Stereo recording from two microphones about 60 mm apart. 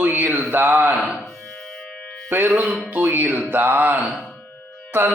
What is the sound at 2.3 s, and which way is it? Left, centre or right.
Speech, right.